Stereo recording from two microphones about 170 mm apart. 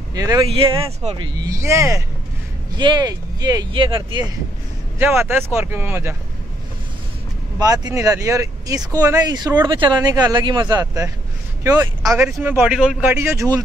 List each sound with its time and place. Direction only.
0.1 s speech: 20° right (ahead or behind)
0.5 s speech: 30° right (ahead or behind)
4.9 s speech: 15° right (ahead or behind)
7.5 s speech: 20° right (ahead or behind)